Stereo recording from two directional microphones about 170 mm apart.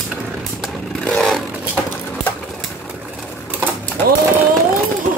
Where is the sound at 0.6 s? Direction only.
Centre (ahead or behind).